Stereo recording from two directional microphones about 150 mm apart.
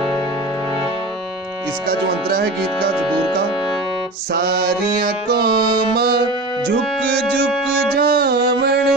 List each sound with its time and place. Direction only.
1.9 s music: 90° right
4.3 s music: 90° right